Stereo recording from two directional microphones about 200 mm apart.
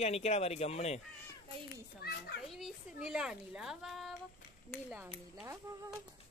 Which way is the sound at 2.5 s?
Centre (ahead or behind).